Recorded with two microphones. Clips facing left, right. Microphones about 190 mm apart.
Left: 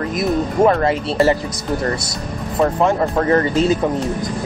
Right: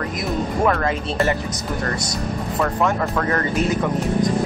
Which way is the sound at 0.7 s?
30° left (ahead or behind).